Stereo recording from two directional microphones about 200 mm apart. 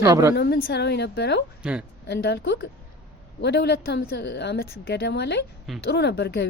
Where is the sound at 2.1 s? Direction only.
55° left (ahead or behind).